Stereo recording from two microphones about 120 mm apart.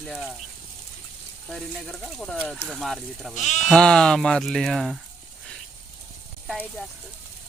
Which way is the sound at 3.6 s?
5° left (ahead or behind).